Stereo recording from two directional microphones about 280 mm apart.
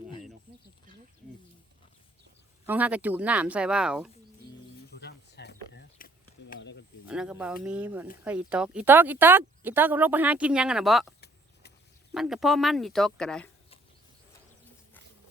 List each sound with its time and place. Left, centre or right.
2.6 s speech: centre
4.9 s a sound: left
7.1 s speech: centre
12.1 s speech: centre